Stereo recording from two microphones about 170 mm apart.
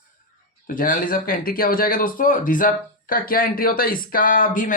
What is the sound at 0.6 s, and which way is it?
Speech, 55° left (ahead or behind).